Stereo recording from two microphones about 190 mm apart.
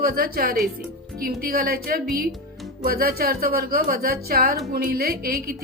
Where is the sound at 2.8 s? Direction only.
50° right (ahead or behind).